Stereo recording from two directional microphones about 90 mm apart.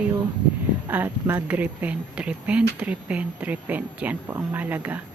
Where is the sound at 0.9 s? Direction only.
20° right (ahead or behind).